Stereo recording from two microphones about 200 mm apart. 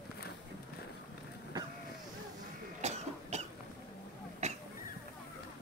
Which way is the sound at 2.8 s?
35° right (ahead or behind).